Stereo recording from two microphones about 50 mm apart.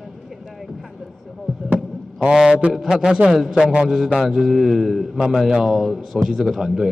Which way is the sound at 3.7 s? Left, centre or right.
Centre.